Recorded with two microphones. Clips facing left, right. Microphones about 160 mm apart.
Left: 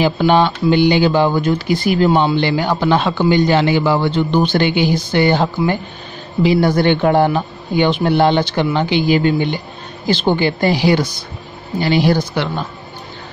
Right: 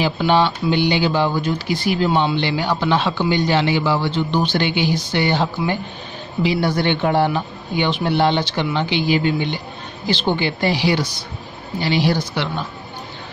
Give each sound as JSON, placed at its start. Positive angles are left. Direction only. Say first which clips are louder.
{"t": 0.0, "sound": "speech", "louder": "left 4 dB", "side_deg": 50}